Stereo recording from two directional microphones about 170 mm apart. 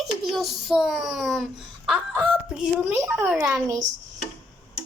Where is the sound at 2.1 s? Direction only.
10° right (ahead or behind).